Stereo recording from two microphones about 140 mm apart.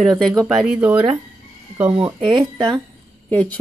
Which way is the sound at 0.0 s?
Centre (ahead or behind).